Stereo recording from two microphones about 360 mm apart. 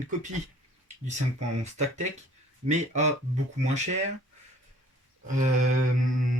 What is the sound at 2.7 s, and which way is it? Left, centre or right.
Speech, centre.